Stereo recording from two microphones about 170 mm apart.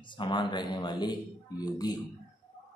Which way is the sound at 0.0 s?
30° left (ahead or behind).